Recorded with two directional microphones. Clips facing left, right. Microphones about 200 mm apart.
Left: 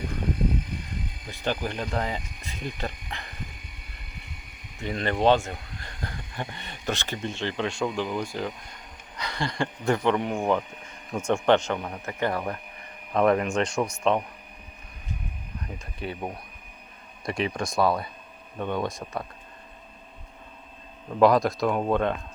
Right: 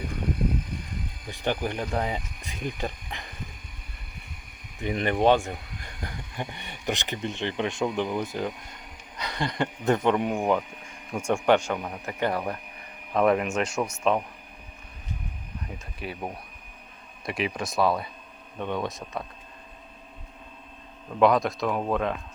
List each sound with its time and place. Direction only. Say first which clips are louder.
1.3 s speech: right 1 dB; 15° right (ahead or behind)
4.8 s speech: right 1 dB; 15° right (ahead or behind)
16.0 s speech: left 2 dB; 5° right (ahead or behind)
21.1 s speech: left 2 dB; centre (ahead or behind)